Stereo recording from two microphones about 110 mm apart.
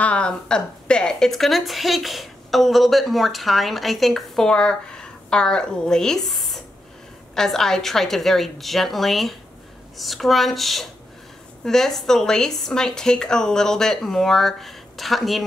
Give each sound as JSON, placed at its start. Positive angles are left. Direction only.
{"t": 0.0, "sound": "a woman's voice", "side_deg": 10}